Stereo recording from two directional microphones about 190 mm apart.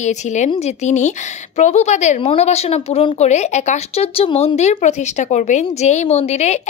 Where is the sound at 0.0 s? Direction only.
40° left (ahead or behind).